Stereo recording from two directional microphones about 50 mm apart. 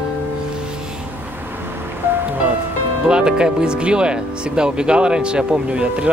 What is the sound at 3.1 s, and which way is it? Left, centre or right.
Speech, centre.